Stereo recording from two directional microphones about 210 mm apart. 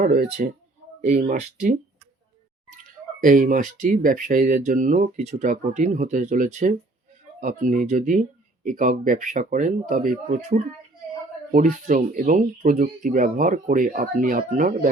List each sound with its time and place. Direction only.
0.0 s speech: 40° right (ahead or behind)
3.2 s speech: 40° right (ahead or behind)